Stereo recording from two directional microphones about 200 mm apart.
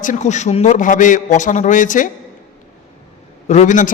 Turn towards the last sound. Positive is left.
turn(degrees=35)  # may be behind; listen again after turning